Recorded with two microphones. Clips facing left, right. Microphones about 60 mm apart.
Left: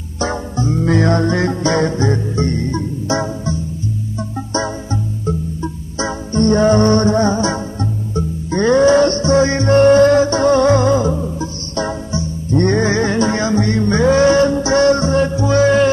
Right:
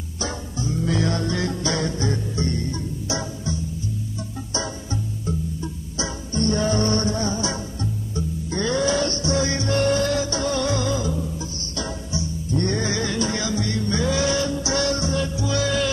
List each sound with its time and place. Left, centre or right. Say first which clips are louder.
0.2 s music: left 9 dB; left
5.2 s music: left 7 dB; left